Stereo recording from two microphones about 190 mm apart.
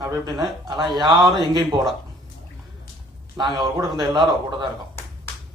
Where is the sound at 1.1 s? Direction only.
Centre (ahead or behind).